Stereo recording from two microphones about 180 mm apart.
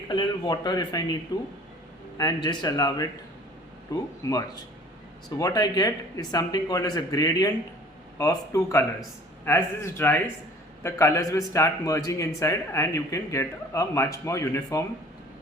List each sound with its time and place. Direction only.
0.1 s speech: 25° left (ahead or behind)